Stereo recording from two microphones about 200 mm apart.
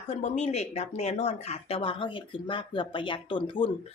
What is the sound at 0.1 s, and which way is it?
Speech, 35° left (ahead or behind).